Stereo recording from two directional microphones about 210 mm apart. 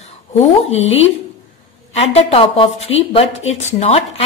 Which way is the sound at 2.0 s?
25° left (ahead or behind).